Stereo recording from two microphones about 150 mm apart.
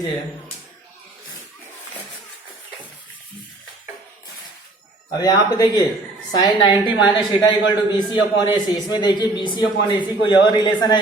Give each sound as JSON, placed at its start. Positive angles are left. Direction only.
{"t": 5.1, "sound": "a man's voice", "side_deg": 25}